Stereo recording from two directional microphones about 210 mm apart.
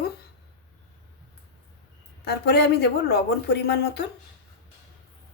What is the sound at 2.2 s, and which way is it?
A woman's voice, 50° left (ahead or behind).